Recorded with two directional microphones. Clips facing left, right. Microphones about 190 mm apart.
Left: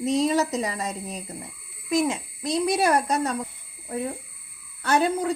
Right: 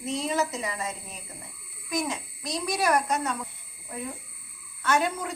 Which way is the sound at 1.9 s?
25° left (ahead or behind).